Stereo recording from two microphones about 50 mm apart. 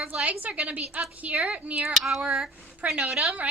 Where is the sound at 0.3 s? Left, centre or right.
Right.